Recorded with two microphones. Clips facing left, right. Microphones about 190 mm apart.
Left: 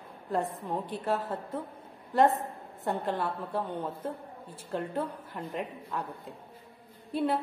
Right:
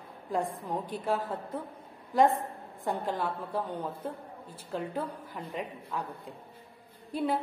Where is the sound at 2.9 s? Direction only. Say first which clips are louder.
Left 1 dB; 5° right (ahead or behind).